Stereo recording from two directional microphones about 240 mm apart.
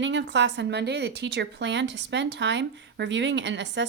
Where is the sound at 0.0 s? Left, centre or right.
Right.